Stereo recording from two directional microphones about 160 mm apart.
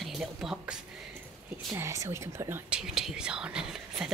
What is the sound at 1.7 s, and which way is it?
Speech, 15° right (ahead or behind).